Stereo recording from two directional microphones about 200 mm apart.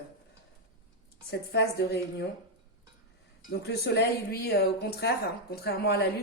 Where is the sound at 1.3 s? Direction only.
55° left (ahead or behind).